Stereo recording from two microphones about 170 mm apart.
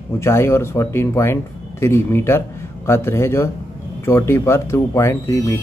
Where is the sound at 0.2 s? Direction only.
15° left (ahead or behind).